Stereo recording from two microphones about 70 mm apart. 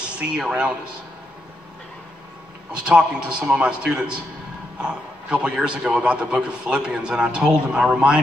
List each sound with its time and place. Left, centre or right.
0.4 s a man's voice: centre
2.7 s a man's voice: centre